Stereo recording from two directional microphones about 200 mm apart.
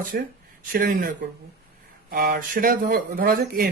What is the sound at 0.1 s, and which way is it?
Speech, 50° right (ahead or behind).